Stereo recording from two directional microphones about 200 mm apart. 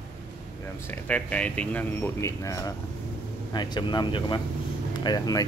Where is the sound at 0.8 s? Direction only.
5° left (ahead or behind).